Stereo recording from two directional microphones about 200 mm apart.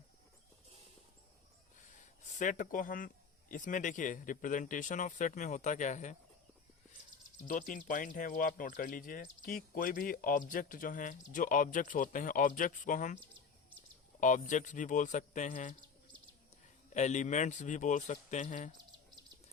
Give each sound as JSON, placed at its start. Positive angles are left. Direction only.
{"t": 2.0, "sound": "speech", "side_deg": 40}
{"t": 7.4, "sound": "speech", "side_deg": 40}
{"t": 14.2, "sound": "speech", "side_deg": 40}
{"t": 16.9, "sound": "speech", "side_deg": 35}